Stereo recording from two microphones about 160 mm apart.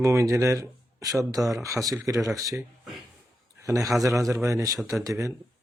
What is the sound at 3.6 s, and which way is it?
A man's voice, 20° right (ahead or behind).